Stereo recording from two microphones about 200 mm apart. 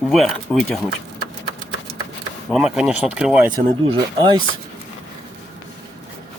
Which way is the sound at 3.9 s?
25° right (ahead or behind).